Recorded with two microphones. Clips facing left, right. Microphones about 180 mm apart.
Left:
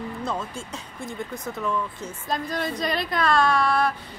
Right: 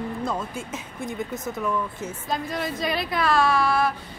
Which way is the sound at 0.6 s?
20° right (ahead or behind).